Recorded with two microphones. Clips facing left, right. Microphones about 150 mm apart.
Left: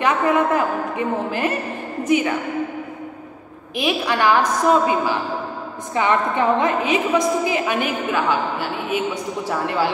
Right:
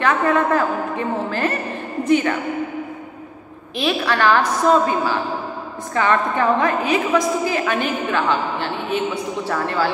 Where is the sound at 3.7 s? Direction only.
15° left (ahead or behind).